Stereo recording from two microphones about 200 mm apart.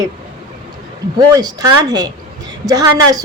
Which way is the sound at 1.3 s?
20° right (ahead or behind).